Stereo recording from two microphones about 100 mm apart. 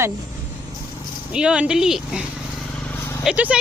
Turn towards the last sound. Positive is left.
turn(degrees=-15)  # may be behind; listen again after turning